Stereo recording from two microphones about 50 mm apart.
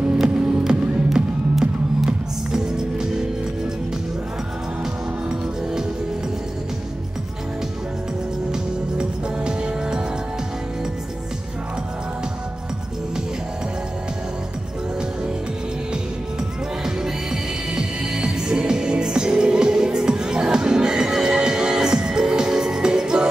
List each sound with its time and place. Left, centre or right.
0.1 s music: centre
5.3 s music: centre
8.5 s music: centre
16.8 s music: centre